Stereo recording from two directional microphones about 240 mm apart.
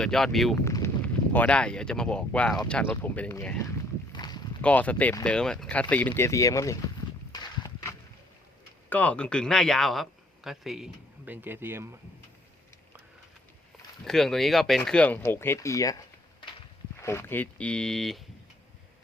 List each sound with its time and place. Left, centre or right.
0.0 s speech: centre
0.5 s speech: centre
4.1 s a sound: centre
4.6 s speech: centre
7.3 s horse: centre
8.9 s speech: centre
14.0 s speech: centre
17.0 s speech: centre